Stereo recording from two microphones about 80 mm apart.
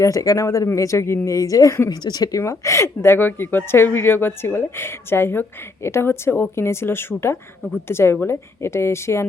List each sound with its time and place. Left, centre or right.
0.0 s a woman's voice: left
1.9 s a woman's voice: left
2.4 s a woman's voice: left